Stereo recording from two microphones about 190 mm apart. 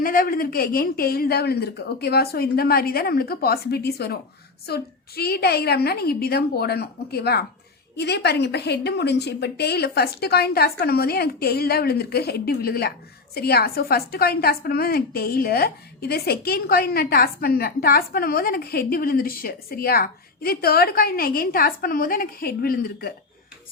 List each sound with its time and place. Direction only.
0.0 s a woman's voice: 50° left (ahead or behind)